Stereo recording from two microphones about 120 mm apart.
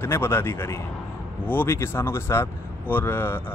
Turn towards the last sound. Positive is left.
turn(degrees=20)  # may be behind; listen again after turning